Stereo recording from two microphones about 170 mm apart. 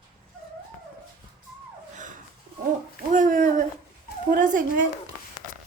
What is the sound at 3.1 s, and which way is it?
Speech, 50° right (ahead or behind).